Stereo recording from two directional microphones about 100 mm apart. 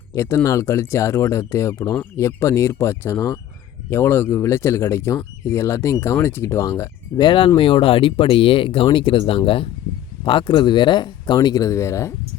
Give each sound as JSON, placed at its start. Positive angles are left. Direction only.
{"t": 0.2, "sound": "speech", "side_deg": 25}
{"t": 7.2, "sound": "speech", "side_deg": 50}